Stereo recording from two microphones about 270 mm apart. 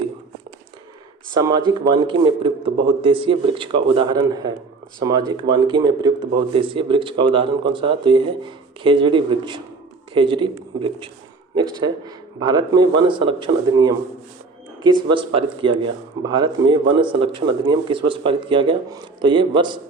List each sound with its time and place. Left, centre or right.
1.3 s speech: centre